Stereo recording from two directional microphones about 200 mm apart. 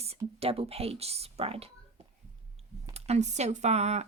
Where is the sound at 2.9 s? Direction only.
35° right (ahead or behind).